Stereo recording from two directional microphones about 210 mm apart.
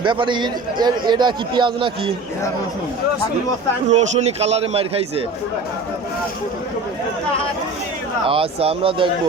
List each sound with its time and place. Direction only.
0.0 s a man's voice: 20° right (ahead or behind)
3.8 s a man's voice: 30° right (ahead or behind)
8.3 s a man's voice: 25° right (ahead or behind)